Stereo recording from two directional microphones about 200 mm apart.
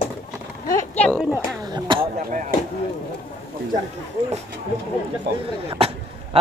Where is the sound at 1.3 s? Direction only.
20° right (ahead or behind).